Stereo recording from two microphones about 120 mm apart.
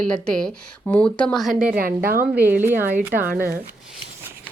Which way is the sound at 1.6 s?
10° right (ahead or behind).